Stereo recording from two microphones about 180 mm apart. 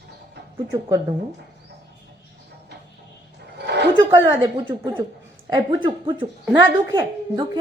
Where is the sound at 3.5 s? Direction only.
70° right (ahead or behind).